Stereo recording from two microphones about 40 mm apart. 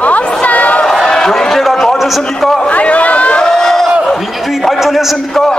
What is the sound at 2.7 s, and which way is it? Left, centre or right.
Speech, left.